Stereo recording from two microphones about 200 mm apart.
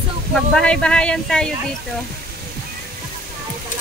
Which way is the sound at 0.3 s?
5° left (ahead or behind).